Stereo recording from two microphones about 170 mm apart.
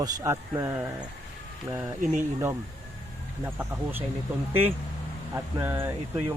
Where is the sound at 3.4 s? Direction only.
10° right (ahead or behind).